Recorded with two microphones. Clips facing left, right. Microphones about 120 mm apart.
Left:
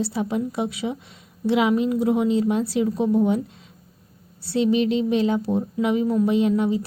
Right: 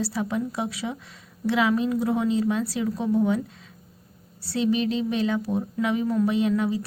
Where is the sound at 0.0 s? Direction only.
25° left (ahead or behind).